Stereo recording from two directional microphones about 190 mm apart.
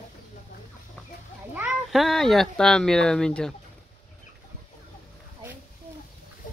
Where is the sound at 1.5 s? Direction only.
Centre (ahead or behind).